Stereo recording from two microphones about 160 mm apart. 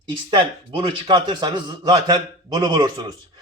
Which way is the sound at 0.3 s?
35° right (ahead or behind).